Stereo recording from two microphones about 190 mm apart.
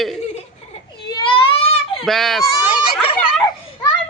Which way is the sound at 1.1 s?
25° left (ahead or behind).